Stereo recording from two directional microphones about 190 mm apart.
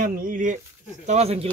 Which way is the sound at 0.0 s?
45° right (ahead or behind).